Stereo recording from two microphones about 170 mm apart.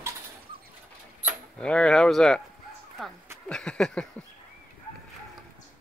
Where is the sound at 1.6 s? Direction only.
5° left (ahead or behind).